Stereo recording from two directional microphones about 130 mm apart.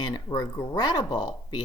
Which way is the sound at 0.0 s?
35° left (ahead or behind).